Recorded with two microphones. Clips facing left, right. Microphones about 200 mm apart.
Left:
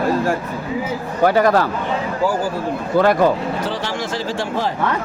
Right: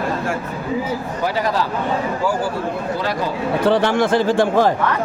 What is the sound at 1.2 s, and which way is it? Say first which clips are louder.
Speech: left 7 dB; 55° left (ahead or behind).